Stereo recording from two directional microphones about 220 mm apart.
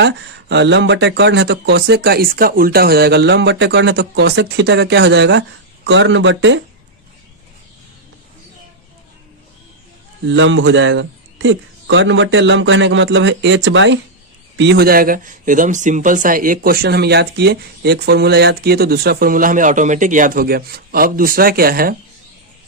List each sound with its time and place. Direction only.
0.0 s speech: 50° right (ahead or behind)
10.2 s speech: 55° right (ahead or behind)